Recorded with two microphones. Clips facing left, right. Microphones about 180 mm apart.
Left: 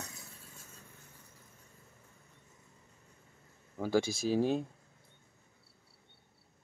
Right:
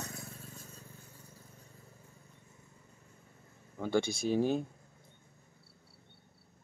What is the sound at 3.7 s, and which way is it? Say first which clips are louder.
Speech: left 1 dB; 5° left (ahead or behind).